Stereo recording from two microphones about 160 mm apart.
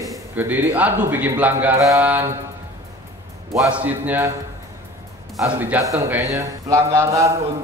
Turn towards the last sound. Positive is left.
turn(degrees=-20)  # may be behind; listen again after turning